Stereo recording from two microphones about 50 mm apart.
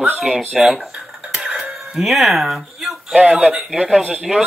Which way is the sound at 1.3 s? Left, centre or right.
Right.